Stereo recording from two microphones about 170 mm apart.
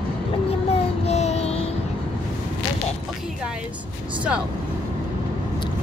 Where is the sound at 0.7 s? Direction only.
40° left (ahead or behind).